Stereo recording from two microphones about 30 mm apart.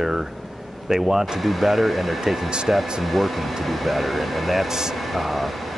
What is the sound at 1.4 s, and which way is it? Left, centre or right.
Speech, centre.